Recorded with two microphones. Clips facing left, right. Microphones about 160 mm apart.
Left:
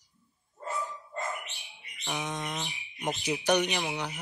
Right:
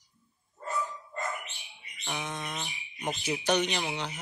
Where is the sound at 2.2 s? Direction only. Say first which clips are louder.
Left 3 dB; 15° left (ahead or behind).